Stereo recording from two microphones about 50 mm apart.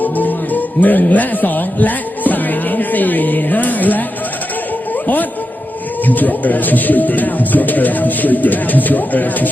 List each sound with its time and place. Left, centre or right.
0.0 s music: left
6.1 s a man's voice: left